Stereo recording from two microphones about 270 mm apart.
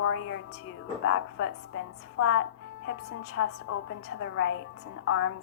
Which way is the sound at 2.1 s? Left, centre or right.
Left.